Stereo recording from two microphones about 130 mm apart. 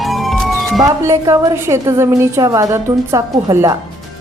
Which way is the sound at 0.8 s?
25° right (ahead or behind).